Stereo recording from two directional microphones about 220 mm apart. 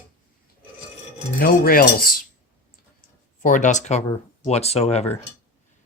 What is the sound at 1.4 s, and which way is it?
Cutlery, 40° left (ahead or behind).